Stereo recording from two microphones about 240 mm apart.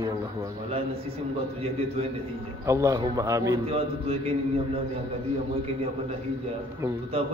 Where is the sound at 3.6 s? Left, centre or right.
Right.